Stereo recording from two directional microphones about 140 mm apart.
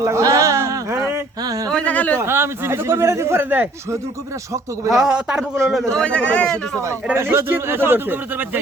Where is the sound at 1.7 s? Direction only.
10° left (ahead or behind).